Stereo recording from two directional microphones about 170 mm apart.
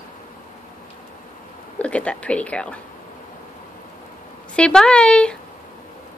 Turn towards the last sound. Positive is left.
turn(degrees=5)  # may be behind; listen again after turning